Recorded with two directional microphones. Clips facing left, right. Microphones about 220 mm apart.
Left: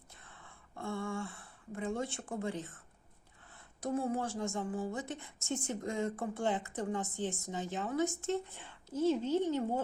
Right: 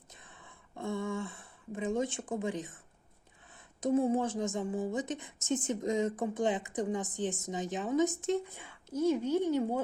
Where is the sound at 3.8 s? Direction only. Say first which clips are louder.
Right 6 dB; 20° right (ahead or behind).